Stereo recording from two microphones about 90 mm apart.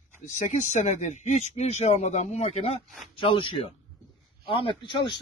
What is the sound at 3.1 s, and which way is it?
Speech, 75° left (ahead or behind).